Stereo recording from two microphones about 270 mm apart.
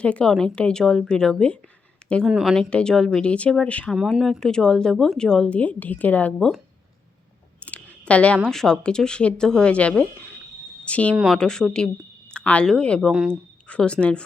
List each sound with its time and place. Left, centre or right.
0.0 s speech: centre
7.6 s a sound: centre
8.4 s speech: centre